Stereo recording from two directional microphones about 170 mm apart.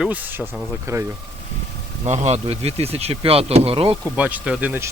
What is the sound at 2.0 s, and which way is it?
Speech, 45° right (ahead or behind).